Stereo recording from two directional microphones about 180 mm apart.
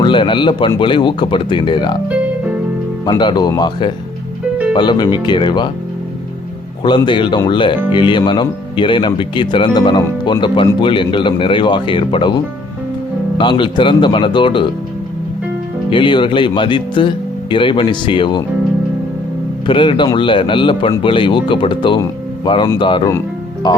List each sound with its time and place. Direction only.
0.0 s speech: 25° left (ahead or behind)
3.1 s speech: 25° left (ahead or behind)
6.8 s speech: 25° left (ahead or behind)
13.4 s speech: 25° left (ahead or behind)
15.9 s speech: 25° left (ahead or behind)
19.6 s speech: 30° left (ahead or behind)
23.6 s music: 20° left (ahead or behind)